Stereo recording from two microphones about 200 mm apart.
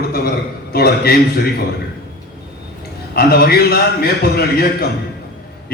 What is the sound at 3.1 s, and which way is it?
A man's voice, 50° left (ahead or behind).